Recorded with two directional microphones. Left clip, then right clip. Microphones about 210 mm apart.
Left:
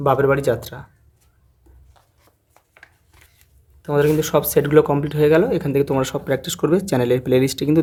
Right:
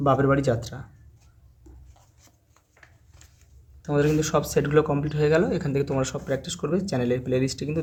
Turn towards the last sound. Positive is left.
turn(degrees=35)  # may be behind; listen again after turning